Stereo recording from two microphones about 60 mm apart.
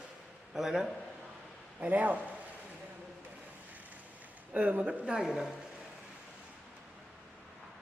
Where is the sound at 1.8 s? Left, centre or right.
Right.